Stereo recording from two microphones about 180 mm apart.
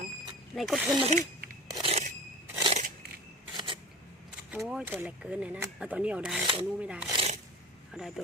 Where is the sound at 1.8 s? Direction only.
35° right (ahead or behind).